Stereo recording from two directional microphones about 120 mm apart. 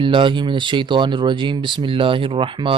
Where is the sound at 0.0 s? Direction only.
45° right (ahead or behind).